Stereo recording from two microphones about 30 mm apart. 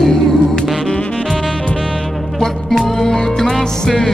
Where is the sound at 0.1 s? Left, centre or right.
Centre.